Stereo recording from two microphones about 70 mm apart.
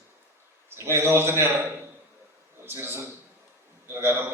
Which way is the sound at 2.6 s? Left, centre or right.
Right.